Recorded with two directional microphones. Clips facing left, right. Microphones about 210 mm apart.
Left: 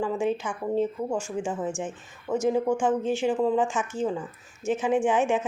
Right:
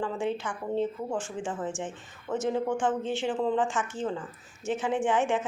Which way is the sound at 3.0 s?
20° right (ahead or behind).